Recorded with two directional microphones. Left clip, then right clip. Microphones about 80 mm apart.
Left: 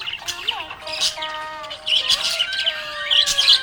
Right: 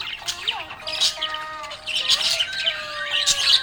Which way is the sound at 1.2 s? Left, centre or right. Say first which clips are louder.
Even; left.